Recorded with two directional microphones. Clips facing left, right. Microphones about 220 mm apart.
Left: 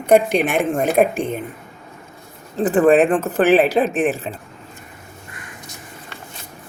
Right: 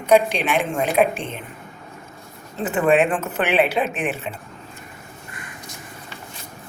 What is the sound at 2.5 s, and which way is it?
Speech, 35° left (ahead or behind).